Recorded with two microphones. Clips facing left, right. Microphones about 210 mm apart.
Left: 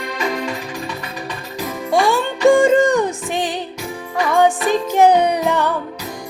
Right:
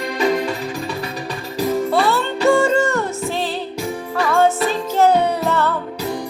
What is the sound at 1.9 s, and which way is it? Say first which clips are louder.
Music: left 1 dB; 15° left (ahead or behind).